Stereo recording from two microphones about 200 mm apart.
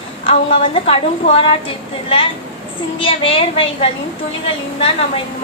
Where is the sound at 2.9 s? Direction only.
25° left (ahead or behind).